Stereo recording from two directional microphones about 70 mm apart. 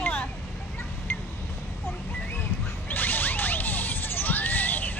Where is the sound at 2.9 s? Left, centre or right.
Left.